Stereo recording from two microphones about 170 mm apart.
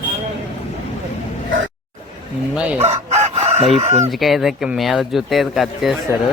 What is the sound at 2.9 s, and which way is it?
Crowing, 40° right (ahead or behind).